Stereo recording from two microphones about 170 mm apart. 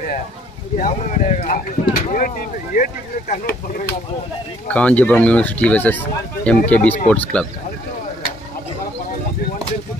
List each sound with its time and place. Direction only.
0.7 s speech: 50° left (ahead or behind)
4.6 s speech: 10° left (ahead or behind)